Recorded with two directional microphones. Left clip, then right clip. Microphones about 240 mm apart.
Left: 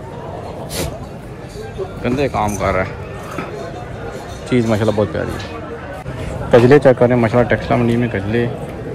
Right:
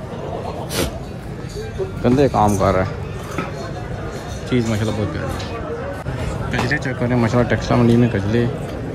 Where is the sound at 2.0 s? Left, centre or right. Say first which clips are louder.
Right 3 dB; centre.